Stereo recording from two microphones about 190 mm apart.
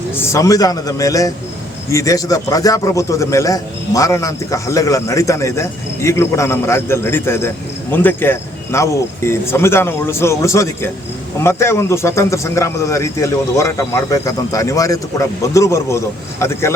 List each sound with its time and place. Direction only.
0.2 s a man's voice: 15° left (ahead or behind)